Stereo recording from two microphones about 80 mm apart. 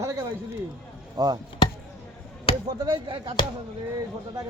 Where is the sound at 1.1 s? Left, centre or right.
Right.